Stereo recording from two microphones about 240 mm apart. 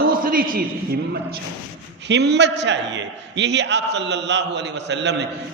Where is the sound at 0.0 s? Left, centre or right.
Right.